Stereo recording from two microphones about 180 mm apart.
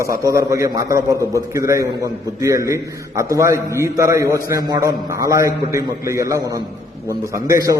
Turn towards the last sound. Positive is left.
turn(degrees=-20)  # may be behind; listen again after turning